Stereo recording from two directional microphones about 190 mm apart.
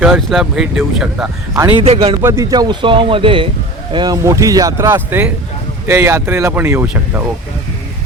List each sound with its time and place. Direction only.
0.0 s speech: centre (ahead or behind)
1.7 s speech: 30° right (ahead or behind)
2.2 s speech: 15° right (ahead or behind)